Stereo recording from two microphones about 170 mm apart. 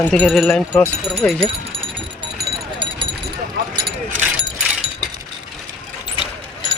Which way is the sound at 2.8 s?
30° right (ahead or behind).